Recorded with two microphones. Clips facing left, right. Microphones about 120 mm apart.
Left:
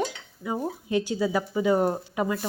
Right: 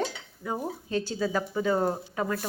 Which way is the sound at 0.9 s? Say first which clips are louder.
Left 4 dB; 15° left (ahead or behind).